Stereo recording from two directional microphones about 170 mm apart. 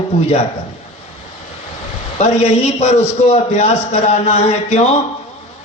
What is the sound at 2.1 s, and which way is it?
Speech, 40° left (ahead or behind).